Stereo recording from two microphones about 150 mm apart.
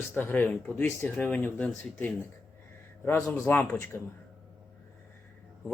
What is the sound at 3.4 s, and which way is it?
Speech, 15° left (ahead or behind).